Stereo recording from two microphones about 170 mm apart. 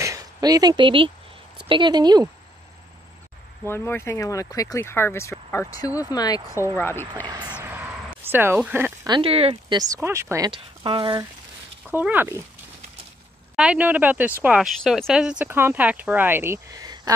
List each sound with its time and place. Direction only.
0.0 s speech: 20° right (ahead or behind)
3.6 s speech: 15° left (ahead or behind)
7.2 s speech: 25° right (ahead or behind)
7.6 s a sound: 15° right (ahead or behind)
9.0 s speech: 30° right (ahead or behind)
10.5 s speech: 30° right (ahead or behind)
11.9 s speech: 10° right (ahead or behind)
13.6 s speech: 5° right (ahead or behind)